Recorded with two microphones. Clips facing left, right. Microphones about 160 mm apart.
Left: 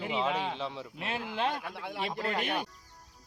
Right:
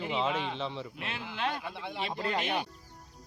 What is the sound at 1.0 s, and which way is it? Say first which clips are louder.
Speech: left 7 dB; 35° left (ahead or behind).